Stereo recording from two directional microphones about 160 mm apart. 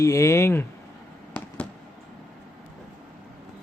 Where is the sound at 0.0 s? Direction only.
20° left (ahead or behind).